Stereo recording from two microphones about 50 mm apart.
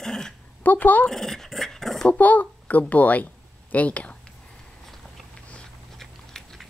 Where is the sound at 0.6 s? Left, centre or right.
Left.